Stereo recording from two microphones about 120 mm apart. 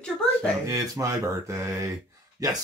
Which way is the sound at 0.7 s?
30° right (ahead or behind).